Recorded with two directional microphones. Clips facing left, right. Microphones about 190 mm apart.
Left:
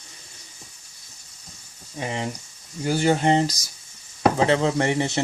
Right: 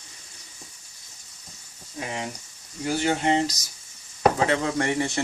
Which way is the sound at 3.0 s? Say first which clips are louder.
Left 4 dB; 35° left (ahead or behind).